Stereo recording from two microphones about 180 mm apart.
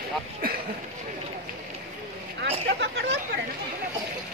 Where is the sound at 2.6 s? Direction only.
70° right (ahead or behind).